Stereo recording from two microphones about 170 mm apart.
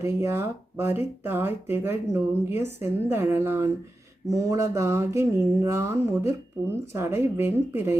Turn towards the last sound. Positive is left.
turn(degrees=-15)  # may be behind; listen again after turning